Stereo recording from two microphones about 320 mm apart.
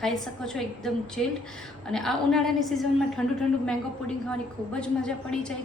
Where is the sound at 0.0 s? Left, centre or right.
Centre.